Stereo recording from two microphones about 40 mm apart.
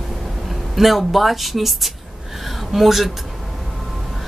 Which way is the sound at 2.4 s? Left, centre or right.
Centre.